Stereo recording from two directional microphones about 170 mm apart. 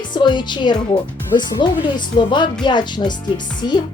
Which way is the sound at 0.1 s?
25° left (ahead or behind).